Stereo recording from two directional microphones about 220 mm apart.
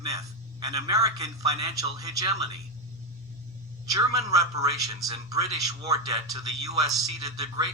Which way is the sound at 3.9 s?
15° right (ahead or behind).